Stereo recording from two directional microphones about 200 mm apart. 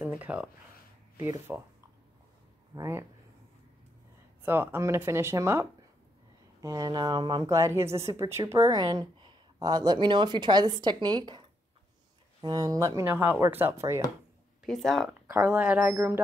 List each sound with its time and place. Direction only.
0.0 s a sound: 10° right (ahead or behind)
1.5 s speech: 10° right (ahead or behind)
2.7 s speech: 15° right (ahead or behind)
4.4 s speech: 10° right (ahead or behind)
14.6 s speech: centre (ahead or behind)